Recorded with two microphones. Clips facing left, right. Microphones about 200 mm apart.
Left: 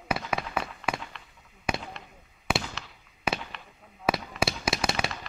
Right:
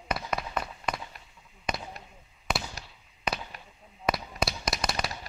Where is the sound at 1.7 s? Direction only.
10° left (ahead or behind).